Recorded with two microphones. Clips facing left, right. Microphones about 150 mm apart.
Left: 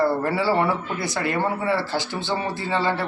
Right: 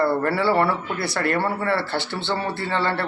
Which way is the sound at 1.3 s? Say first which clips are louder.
Right 1 dB; 15° left (ahead or behind).